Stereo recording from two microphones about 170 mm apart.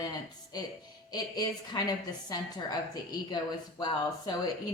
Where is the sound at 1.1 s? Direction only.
25° left (ahead or behind).